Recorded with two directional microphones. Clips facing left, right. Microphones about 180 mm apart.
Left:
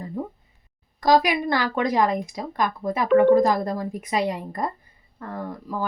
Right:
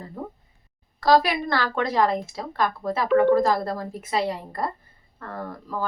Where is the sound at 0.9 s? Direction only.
15° left (ahead or behind).